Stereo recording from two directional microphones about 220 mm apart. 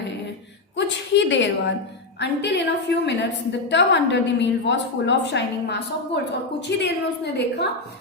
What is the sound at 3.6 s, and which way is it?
A woman's voice, 55° left (ahead or behind).